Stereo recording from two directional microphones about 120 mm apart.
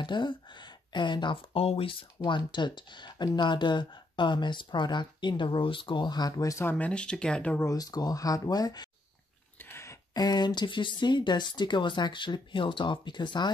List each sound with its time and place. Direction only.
0.0 s speech: 40° left (ahead or behind)
6.7 s speech: 10° left (ahead or behind)
7.6 s speech: 30° left (ahead or behind)
9.6 s a sound: 20° left (ahead or behind)
10.1 s speech: 35° left (ahead or behind)